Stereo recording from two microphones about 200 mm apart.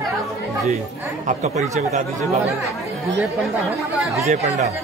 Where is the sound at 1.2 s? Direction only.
35° right (ahead or behind).